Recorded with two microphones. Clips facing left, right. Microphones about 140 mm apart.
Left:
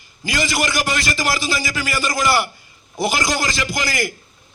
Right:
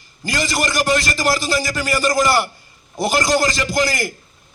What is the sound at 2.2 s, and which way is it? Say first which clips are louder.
A man's voice: right 2 dB; 5° left (ahead or behind).